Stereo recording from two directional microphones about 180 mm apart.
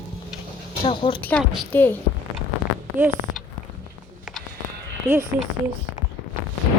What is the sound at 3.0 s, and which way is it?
Speech, 45° right (ahead or behind).